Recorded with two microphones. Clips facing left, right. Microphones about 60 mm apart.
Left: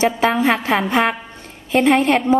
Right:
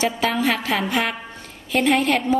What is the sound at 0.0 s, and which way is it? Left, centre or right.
A woman's voice, left.